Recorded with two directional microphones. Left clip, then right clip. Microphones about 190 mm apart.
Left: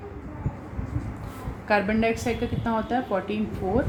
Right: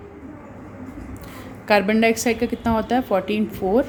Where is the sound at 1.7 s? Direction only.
55° right (ahead or behind).